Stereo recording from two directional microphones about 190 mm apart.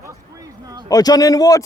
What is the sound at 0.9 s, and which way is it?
Speech, 20° left (ahead or behind).